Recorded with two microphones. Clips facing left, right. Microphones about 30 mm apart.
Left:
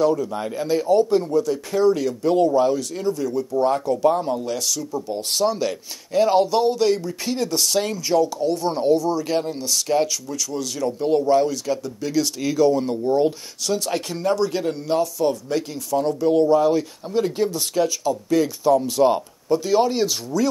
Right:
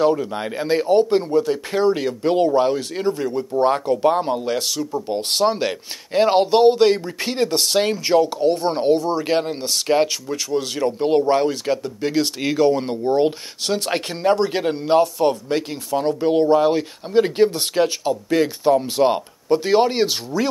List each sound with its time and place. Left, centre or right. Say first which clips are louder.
0.0 s speech: right 1 dB; right